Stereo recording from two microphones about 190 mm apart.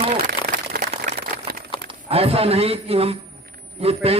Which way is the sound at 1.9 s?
30° right (ahead or behind).